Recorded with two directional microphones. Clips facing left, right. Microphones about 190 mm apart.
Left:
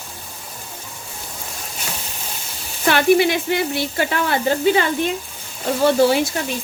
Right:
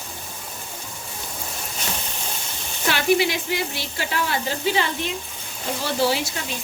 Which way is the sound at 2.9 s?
55° left (ahead or behind).